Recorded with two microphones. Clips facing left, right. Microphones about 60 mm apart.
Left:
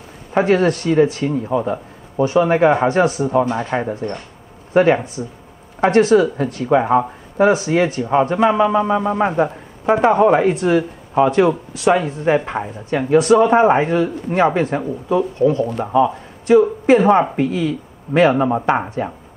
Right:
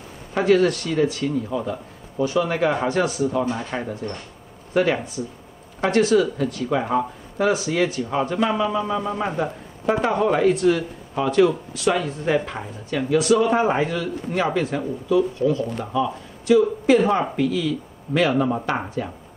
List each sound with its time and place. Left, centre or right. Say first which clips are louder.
0.3 s a man's voice: left 3 dB; left
4.7 s a man's voice: left 7 dB; left